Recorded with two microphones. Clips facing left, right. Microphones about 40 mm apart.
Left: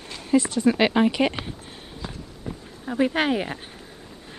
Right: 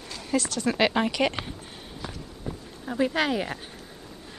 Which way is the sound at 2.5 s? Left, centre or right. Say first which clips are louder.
Left 1 dB; left.